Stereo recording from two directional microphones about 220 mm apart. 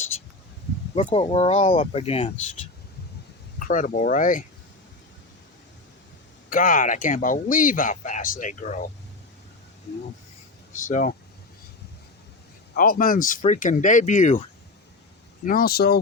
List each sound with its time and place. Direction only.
0.9 s speech: 25° left (ahead or behind)
3.6 s speech: 35° left (ahead or behind)
6.5 s speech: 40° left (ahead or behind)
10.8 s speech: 35° left (ahead or behind)
12.7 s speech: 40° left (ahead or behind)
15.4 s speech: 40° left (ahead or behind)